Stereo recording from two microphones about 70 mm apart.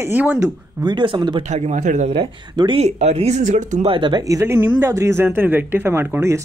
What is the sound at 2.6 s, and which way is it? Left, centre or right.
Speech, right.